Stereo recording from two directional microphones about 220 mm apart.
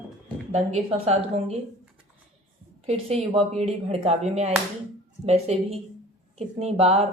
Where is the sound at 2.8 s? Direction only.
30° right (ahead or behind).